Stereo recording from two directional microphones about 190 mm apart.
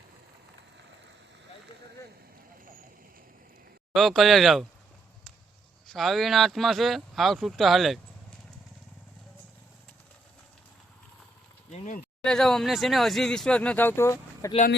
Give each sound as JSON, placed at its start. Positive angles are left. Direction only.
{"t": 3.9, "sound": "speech", "side_deg": 0}
{"t": 5.9, "sound": "speech", "side_deg": 0}
{"t": 11.7, "sound": "a sound", "side_deg": 35}
{"t": 12.2, "sound": "speech", "side_deg": 5}